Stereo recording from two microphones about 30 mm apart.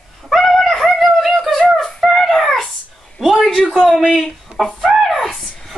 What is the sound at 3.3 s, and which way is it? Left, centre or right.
Speech, centre.